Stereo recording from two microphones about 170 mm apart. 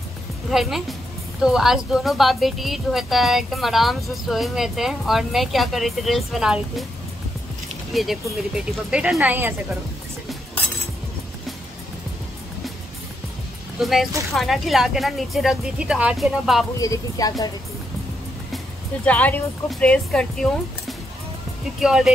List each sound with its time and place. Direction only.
0.5 s speech: centre (ahead or behind)
7.9 s speech: centre (ahead or behind)
13.7 s speech: centre (ahead or behind)
16.8 s a woman's voice: 20° left (ahead or behind)
19.0 s speech: 10° left (ahead or behind)
21.7 s speech: centre (ahead or behind)